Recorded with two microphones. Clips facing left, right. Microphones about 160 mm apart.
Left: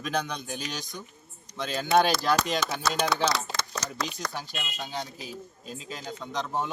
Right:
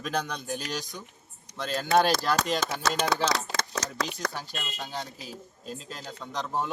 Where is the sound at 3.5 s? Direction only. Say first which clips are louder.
Right 2 dB; 90° right.